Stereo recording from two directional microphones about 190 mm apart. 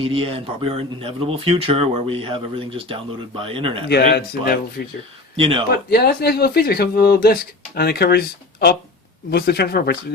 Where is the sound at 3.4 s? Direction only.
30° right (ahead or behind).